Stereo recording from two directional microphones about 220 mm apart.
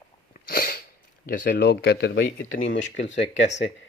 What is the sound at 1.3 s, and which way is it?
Speech, 45° left (ahead or behind).